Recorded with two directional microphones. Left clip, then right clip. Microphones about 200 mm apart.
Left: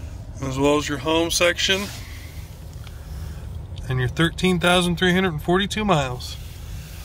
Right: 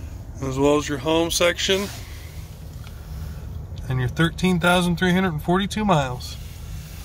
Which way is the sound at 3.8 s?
Centre (ahead or behind).